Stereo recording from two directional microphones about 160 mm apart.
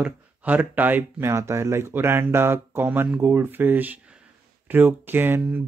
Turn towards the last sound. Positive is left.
turn(degrees=-10)  # may be behind; listen again after turning